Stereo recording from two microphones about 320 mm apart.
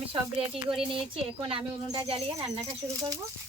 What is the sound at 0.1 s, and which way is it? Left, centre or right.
Speech, centre.